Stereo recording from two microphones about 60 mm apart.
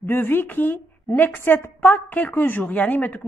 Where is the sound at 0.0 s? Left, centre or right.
Left.